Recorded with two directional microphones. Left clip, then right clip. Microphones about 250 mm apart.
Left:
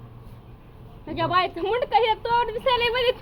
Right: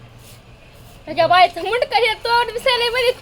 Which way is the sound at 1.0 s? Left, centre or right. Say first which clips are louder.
Right 10 dB; right.